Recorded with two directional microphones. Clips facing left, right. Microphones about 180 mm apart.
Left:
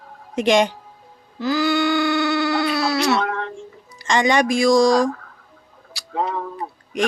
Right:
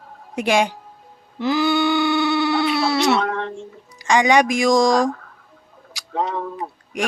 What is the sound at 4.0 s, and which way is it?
Speech, 10° right (ahead or behind).